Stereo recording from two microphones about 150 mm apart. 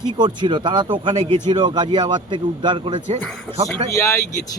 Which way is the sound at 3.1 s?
45° right (ahead or behind).